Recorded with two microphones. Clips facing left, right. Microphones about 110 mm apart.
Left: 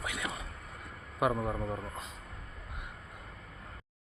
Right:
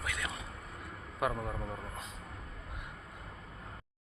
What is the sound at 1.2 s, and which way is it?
Speech, 5° left (ahead or behind).